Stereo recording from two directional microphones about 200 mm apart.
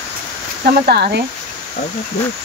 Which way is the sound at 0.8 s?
55° right (ahead or behind).